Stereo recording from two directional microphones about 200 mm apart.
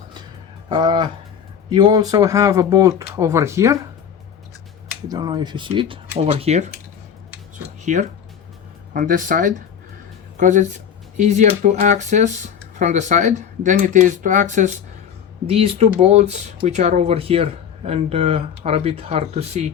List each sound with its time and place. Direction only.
0.7 s speech: 25° right (ahead or behind)
5.0 s speech: 20° right (ahead or behind)
7.9 s speech: 40° right (ahead or behind)